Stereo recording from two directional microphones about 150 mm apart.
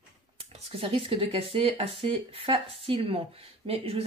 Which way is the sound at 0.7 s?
40° right (ahead or behind).